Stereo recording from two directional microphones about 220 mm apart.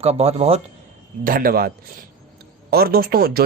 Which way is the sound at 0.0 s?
30° right (ahead or behind).